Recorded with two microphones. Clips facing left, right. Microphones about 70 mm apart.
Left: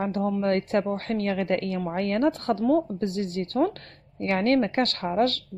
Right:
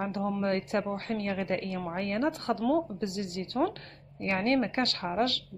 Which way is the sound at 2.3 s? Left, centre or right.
Left.